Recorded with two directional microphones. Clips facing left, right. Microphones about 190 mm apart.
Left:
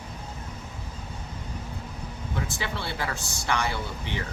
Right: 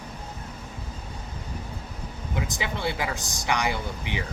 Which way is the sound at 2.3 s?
15° right (ahead or behind).